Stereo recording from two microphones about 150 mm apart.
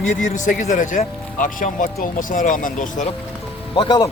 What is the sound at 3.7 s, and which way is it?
Speech, 30° left (ahead or behind).